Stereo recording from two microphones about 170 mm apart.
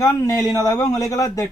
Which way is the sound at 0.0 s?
20° left (ahead or behind).